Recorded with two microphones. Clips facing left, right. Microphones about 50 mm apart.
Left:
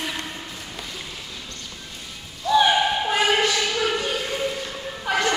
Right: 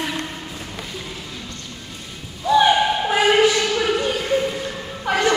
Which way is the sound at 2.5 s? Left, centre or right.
Centre.